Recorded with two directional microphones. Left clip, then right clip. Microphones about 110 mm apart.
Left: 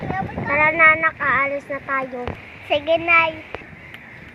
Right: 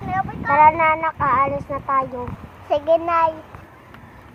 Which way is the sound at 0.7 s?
5° right (ahead or behind).